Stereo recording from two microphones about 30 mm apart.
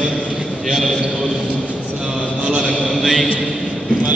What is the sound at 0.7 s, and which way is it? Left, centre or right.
Speech, centre.